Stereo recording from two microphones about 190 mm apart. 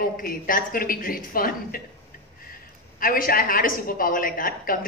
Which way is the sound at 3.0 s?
50° left (ahead or behind).